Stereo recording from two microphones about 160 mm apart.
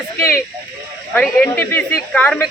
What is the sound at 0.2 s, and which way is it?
A man's voice, 15° left (ahead or behind).